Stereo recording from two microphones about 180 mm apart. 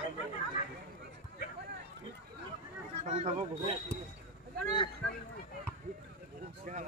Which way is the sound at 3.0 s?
40° right (ahead or behind).